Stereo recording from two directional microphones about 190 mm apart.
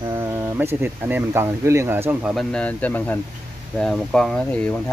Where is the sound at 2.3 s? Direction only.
5° left (ahead or behind).